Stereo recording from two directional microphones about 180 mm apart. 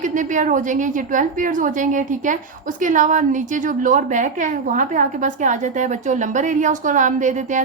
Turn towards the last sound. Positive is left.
turn(degrees=-45)  # may be behind; listen again after turning